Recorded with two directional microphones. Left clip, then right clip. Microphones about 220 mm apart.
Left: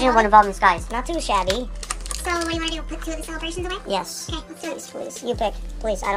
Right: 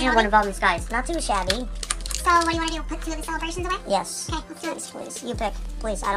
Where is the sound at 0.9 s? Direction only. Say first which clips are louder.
Left 2 dB; centre (ahead or behind).